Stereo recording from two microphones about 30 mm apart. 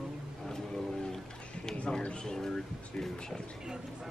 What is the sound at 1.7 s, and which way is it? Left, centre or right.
Speech, left.